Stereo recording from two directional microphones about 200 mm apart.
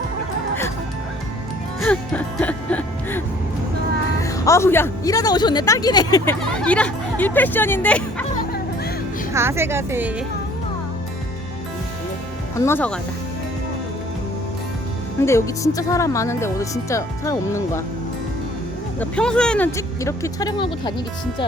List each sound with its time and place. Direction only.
1.8 s music: 5° left (ahead or behind)
4.2 s speech: 15° left (ahead or behind)
6.6 s speech: 5° left (ahead or behind)
9.3 s a woman's voice: 15° right (ahead or behind)
12.5 s speech: 10° left (ahead or behind)
15.2 s speech: 15° left (ahead or behind)
18.9 s speech: 5° left (ahead or behind); by 20.9 s 25° left (ahead or behind)